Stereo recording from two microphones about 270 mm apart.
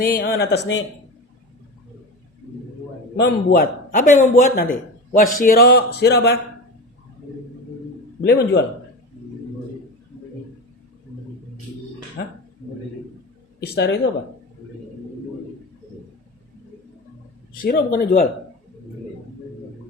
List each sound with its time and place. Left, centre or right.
0.0 s a man's voice: left
3.2 s a man's voice: left
8.2 s a man's voice: left
12.2 s a man's voice: left
13.7 s a man's voice: left
17.6 s a man's voice: left